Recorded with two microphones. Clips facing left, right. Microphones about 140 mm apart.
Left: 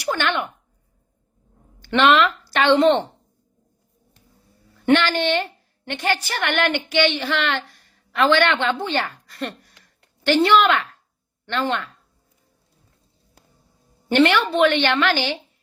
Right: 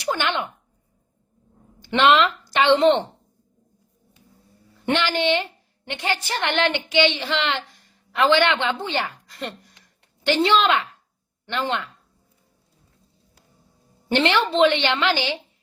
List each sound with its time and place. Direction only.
0.0 s a sound: 20° right (ahead or behind)
1.8 s a woman's voice: 15° right (ahead or behind)
4.9 s a woman's voice: 15° right (ahead or behind)
14.1 s a woman's voice: 20° right (ahead or behind)